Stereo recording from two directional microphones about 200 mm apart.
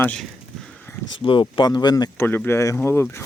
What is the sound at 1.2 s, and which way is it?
Speech, 25° left (ahead or behind).